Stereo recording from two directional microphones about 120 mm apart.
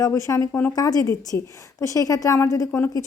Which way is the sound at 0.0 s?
25° left (ahead or behind).